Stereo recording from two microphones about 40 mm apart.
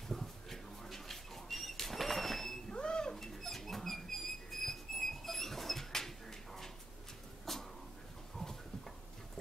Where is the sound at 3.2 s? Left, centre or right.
Centre.